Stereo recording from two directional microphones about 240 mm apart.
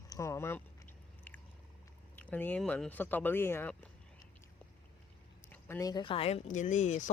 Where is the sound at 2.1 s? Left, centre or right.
Centre.